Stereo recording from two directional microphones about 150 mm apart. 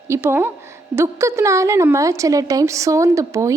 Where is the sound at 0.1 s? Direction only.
15° right (ahead or behind).